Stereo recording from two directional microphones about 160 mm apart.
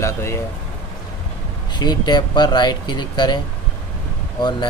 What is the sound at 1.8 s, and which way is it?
Speech, 25° left (ahead or behind).